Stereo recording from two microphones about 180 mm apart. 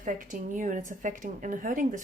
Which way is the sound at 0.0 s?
45° right (ahead or behind).